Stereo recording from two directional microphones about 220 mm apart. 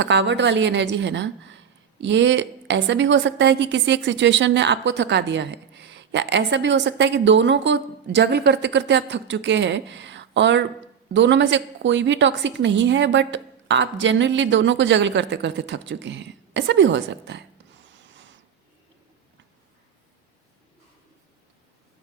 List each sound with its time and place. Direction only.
0.0 s a woman's voice: 55° right (ahead or behind)